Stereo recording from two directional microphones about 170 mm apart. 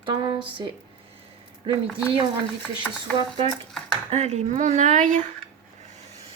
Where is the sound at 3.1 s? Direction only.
30° right (ahead or behind); by 5.2 s 45° right (ahead or behind).